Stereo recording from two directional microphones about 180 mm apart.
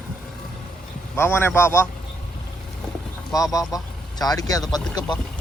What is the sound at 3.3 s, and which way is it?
A man's voice, 20° left (ahead or behind).